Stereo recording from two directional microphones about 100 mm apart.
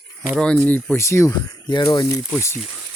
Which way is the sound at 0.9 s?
30° left (ahead or behind).